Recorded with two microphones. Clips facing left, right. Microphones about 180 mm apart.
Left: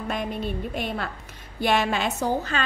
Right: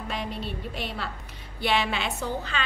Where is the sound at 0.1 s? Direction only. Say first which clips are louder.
Left 5 dB; 50° left (ahead or behind).